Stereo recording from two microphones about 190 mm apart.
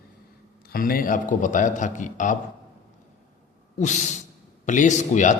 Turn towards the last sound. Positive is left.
turn(degrees=40)  # may be behind; listen again after turning